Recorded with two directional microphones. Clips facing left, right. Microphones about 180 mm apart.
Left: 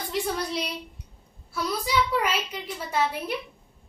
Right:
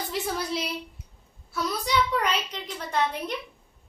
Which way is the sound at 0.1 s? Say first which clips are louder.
Left 3 dB; centre (ahead or behind).